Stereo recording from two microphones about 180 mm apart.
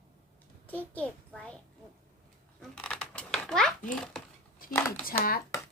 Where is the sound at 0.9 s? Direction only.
5° left (ahead or behind).